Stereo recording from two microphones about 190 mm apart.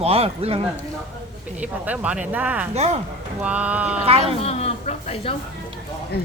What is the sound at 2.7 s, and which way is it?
Speech, 35° right (ahead or behind).